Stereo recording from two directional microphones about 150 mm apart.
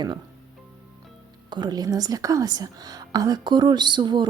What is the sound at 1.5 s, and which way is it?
Speech, 30° right (ahead or behind).